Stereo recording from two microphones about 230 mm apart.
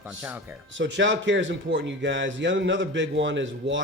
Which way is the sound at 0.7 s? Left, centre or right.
Right.